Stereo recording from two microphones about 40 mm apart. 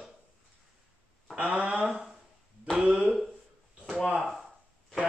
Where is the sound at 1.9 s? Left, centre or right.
Centre.